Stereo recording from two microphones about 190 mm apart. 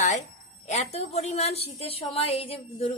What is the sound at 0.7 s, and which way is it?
A woman's voice, 35° left (ahead or behind).